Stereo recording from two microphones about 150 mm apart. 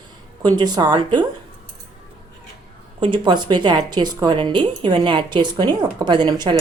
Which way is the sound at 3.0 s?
35° right (ahead or behind).